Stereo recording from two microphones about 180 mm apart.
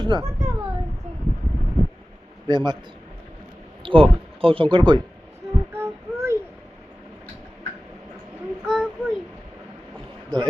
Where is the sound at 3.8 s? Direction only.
30° right (ahead or behind).